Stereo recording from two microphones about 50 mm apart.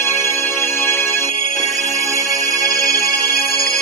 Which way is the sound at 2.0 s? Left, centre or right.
Left.